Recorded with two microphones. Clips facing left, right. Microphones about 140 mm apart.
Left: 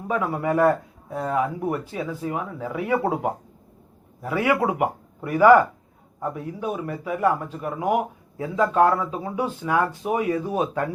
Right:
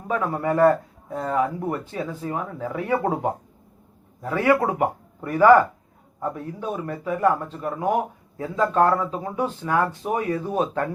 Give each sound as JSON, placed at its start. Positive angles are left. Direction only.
{"t": 0.1, "sound": "speech", "side_deg": 10}